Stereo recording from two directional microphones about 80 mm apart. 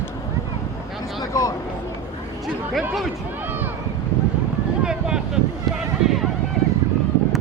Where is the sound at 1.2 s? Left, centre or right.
Left.